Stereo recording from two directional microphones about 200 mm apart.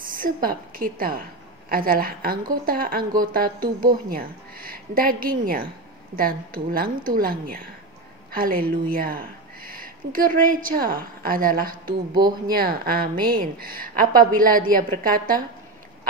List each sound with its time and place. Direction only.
0.0 s a woman's voice: 45° right (ahead or behind)
12.1 s speech: 20° right (ahead or behind)
12.4 s a woman's voice: 50° right (ahead or behind)